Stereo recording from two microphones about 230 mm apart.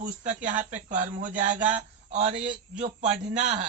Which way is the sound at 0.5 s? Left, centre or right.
Centre.